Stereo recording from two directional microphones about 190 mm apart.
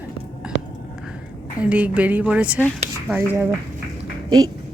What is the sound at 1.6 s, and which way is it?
Speech, 5° right (ahead or behind).